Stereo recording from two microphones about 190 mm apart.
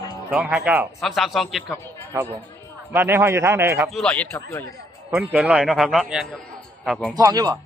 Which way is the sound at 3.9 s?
5° left (ahead or behind).